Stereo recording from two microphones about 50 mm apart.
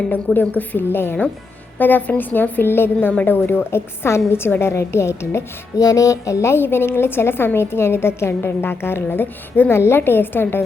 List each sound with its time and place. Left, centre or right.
0.3 s a woman's voice: left
1.8 s a woman's voice: left
3.1 s a woman's voice: left
3.3 s a woman's voice: left
4.7 s a woman's voice: left
5.9 s a woman's voice: left